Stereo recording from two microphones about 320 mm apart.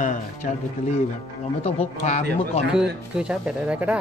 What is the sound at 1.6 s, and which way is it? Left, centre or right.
Speech, centre.